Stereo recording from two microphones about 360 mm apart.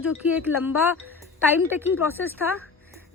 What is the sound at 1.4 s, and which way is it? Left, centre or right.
Speech, centre.